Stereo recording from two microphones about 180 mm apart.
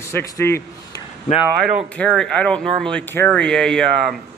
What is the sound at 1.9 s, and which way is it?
A man's voice, centre (ahead or behind).